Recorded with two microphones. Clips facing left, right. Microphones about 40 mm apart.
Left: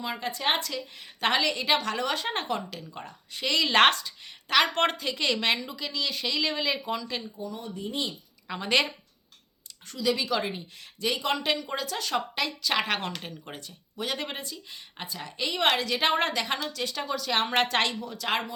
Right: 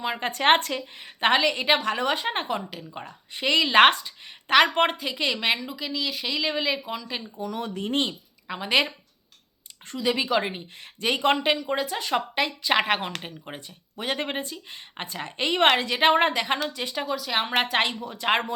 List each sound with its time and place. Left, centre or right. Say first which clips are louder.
0.0 s a woman's voice: right 5 dB; right
0.3 s speech: right 8 dB; right
0.7 s a woman's voice: right 4 dB; right
4.4 s a woman's voice: right 4 dB; right; by 7.3 s centre
7.3 s speech: right 5 dB; right
8.4 s a woman's voice: right 2 dB; centre
9.8 s speech: right 2 dB; right
11.4 s a woman's voice: right 5 dB; centre
17.1 s a woman's voice: right 1 dB; centre; by 18.4 s right